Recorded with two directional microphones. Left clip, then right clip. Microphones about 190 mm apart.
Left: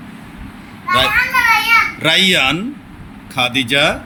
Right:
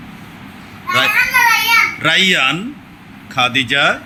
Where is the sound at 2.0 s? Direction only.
5° left (ahead or behind).